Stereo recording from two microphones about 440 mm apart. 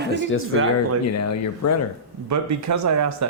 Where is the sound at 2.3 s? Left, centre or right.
Right.